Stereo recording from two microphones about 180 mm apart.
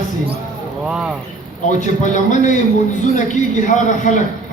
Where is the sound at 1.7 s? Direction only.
45° left (ahead or behind).